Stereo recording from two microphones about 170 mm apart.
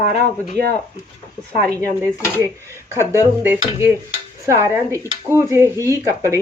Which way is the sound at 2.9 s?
15° right (ahead or behind).